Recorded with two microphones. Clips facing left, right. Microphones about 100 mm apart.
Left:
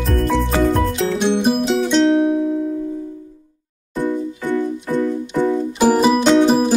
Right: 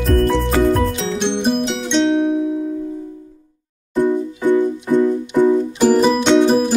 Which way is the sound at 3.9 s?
20° right (ahead or behind).